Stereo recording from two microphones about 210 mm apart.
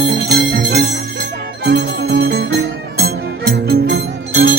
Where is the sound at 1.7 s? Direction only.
50° right (ahead or behind).